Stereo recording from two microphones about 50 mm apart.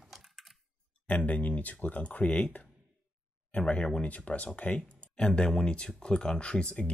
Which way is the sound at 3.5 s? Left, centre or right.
Left.